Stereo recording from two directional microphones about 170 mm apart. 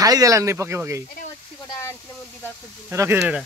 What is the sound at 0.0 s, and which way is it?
Speech, 20° right (ahead or behind).